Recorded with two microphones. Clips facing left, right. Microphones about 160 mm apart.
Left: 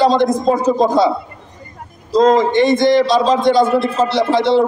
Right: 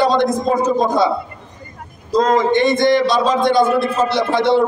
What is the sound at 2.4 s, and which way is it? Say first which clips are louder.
A man's voice: left 2 dB; 55° right (ahead or behind).